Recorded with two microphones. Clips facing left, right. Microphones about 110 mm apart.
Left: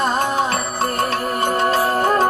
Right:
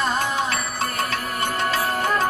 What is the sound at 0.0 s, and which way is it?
Music, 35° left (ahead or behind).